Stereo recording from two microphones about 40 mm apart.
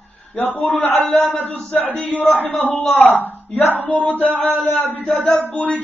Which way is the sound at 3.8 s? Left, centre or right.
Left.